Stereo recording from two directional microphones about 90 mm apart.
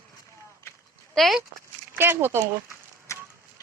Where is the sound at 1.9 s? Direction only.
25° right (ahead or behind).